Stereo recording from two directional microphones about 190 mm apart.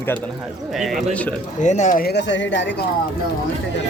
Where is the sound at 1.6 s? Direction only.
40° left (ahead or behind); by 2.8 s 70° left (ahead or behind).